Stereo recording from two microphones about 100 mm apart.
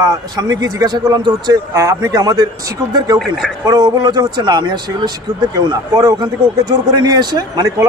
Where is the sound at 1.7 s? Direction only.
35° right (ahead or behind).